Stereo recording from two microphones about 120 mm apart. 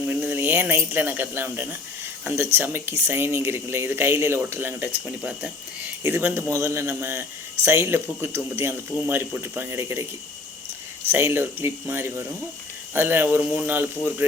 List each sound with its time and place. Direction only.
0.1 s a sound: 15° right (ahead or behind)
0.9 s speech: 15° right (ahead or behind)
11.1 s speech: 20° right (ahead or behind)